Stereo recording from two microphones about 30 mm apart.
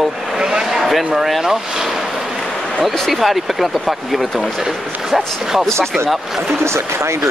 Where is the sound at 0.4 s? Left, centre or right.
Right.